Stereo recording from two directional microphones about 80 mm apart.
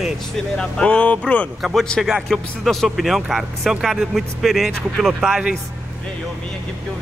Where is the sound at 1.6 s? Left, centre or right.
Centre.